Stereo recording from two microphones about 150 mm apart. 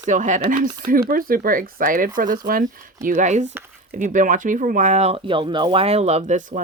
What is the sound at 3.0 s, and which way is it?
Speech, 55° right (ahead or behind).